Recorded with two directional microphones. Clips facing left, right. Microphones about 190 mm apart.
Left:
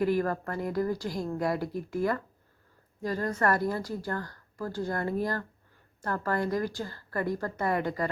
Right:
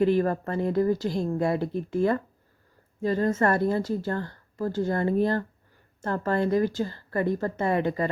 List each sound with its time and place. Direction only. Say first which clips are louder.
0.0 s a woman's voice: right 4 dB; 25° right (ahead or behind)